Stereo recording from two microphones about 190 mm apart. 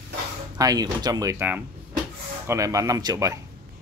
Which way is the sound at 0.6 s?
20° right (ahead or behind).